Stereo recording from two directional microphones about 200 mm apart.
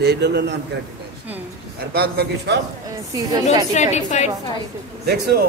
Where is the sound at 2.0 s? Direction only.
55° right (ahead or behind).